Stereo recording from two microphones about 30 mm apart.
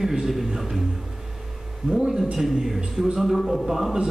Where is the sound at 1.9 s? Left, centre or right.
Right.